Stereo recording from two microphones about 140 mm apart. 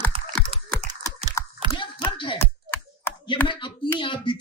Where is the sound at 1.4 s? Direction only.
20° left (ahead or behind).